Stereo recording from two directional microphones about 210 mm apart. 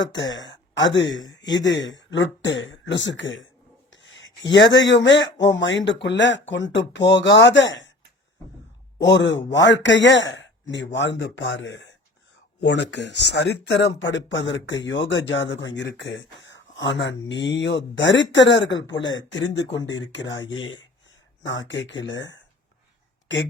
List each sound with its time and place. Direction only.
0.0 s speech: 60° left (ahead or behind)
3.9 s a sound: 65° left (ahead or behind)
4.5 s speech: 60° left (ahead or behind)
9.0 s speech: 60° left (ahead or behind)